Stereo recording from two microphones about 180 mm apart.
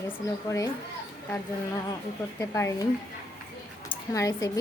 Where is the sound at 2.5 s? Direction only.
15° left (ahead or behind).